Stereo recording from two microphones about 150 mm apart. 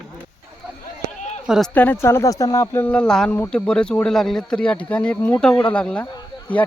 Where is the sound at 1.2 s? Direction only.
50° left (ahead or behind).